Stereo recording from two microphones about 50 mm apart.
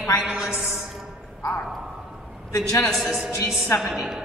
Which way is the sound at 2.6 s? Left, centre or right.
Left.